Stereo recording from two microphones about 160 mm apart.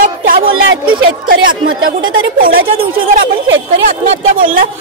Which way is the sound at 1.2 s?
60° right (ahead or behind).